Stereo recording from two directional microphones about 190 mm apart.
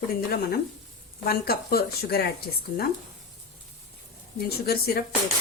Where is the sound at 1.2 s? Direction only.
55° left (ahead or behind).